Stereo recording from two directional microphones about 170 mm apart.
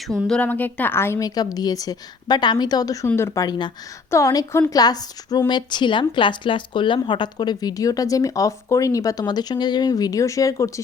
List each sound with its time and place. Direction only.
0.1 s a woman's voice: 5° left (ahead or behind)